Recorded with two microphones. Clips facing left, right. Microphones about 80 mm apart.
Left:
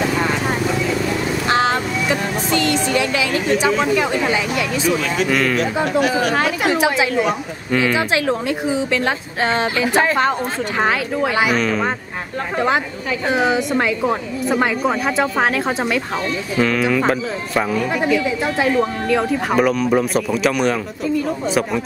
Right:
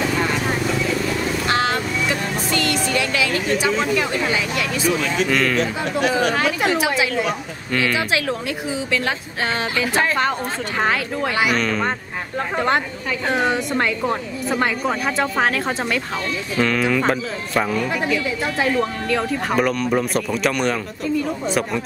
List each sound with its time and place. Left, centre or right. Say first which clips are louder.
0.2 s vehicle: left 2 dB; centre
5.2 s speech: left 1 dB; centre